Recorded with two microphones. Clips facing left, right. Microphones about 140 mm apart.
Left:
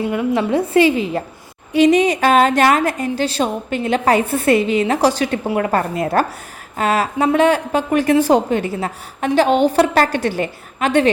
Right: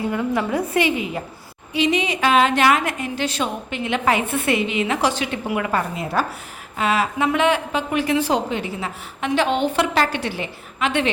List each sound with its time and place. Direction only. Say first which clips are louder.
0.1 s a woman's voice: left 5 dB; 20° left (ahead or behind)
1.7 s a woman's voice: left 8 dB; 45° left (ahead or behind)